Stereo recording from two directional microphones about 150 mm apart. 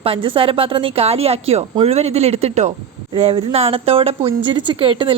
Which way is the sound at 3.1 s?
35° right (ahead or behind).